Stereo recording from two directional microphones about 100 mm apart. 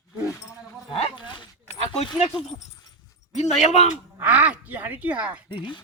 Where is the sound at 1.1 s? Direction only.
50° left (ahead or behind).